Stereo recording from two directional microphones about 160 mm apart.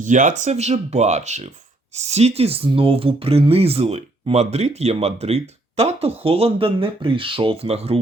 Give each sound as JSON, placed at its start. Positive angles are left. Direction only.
{"t": 0.0, "sound": "speech", "side_deg": -50}